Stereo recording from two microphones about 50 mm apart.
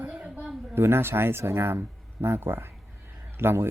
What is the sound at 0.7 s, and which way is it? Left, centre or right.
A man's voice, right.